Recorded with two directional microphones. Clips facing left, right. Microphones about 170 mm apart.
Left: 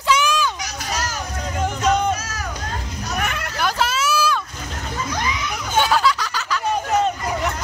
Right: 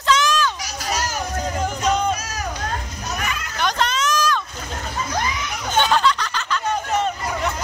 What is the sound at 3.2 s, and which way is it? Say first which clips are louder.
Children playing: left 3 dB; 60° left (ahead or behind).